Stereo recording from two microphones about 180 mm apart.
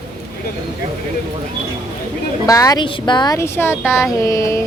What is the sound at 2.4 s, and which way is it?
Speech, 20° left (ahead or behind).